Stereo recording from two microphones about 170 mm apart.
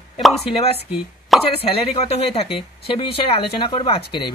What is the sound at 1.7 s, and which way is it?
Speech, 35° left (ahead or behind).